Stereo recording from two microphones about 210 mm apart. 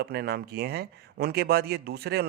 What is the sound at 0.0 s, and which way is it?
A man's voice, 50° right (ahead or behind).